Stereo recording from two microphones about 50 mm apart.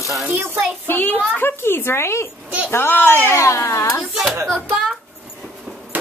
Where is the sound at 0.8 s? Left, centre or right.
Left.